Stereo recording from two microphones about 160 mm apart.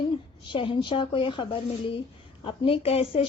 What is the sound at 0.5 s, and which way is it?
A woman's voice, 30° left (ahead or behind).